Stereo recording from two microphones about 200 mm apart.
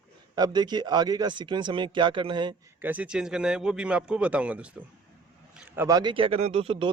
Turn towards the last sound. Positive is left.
turn(degrees=-30)  # may be behind; listen again after turning